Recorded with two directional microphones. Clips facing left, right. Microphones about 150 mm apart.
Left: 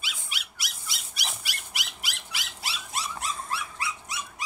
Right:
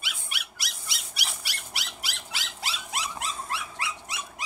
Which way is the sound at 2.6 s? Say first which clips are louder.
Right 1 dB; 90° right.